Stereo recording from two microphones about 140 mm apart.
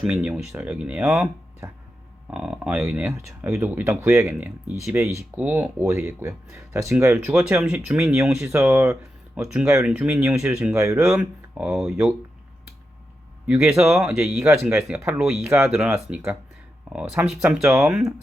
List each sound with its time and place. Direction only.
0.0 s speech: 10° right (ahead or behind)
1.6 s speech: 20° right (ahead or behind)
2.3 s speech: 5° right (ahead or behind)
2.9 s speech: 15° right (ahead or behind)
7.3 s speech: 5° right (ahead or behind)
10.8 s speech: 20° right (ahead or behind)
11.0 s speech: 5° right (ahead or behind)
13.9 s speech: 5° right (ahead or behind)